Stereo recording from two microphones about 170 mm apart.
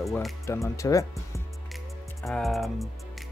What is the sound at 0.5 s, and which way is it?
Speech, 20° left (ahead or behind).